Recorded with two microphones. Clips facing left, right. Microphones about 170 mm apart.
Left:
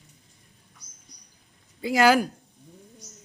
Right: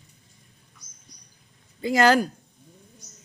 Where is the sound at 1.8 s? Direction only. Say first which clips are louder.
Even; 10° left (ahead or behind).